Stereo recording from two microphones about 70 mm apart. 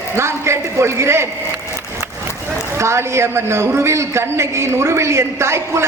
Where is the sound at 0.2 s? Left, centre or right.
Right.